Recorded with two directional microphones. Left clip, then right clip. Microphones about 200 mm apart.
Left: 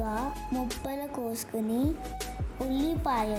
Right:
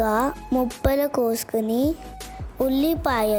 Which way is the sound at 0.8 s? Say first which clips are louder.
Right 14 dB; 45° right (ahead or behind).